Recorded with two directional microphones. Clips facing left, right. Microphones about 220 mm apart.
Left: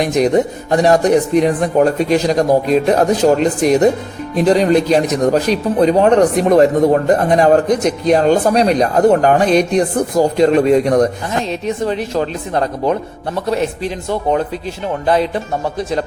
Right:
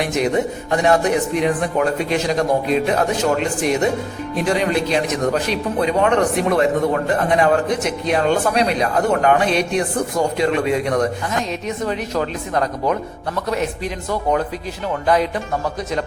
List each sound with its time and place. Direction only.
0.0 s a man's voice: 40° left (ahead or behind)